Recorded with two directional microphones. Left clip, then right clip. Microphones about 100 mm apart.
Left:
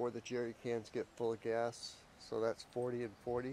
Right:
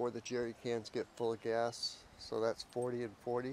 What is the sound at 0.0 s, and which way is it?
Speech, 15° right (ahead or behind).